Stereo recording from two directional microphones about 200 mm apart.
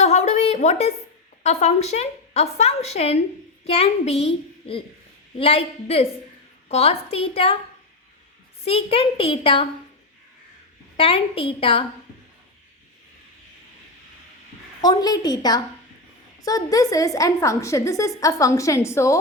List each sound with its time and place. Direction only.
0.0 s a sound: 35° left (ahead or behind)
1.5 s a woman's voice: 35° left (ahead or behind)
8.6 s a woman's voice: 30° left (ahead or behind)
10.9 s a woman's voice: 25° left (ahead or behind)
14.8 s a woman's voice: 20° left (ahead or behind)